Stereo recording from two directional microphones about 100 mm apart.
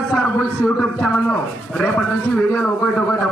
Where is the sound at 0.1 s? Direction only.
5° left (ahead or behind).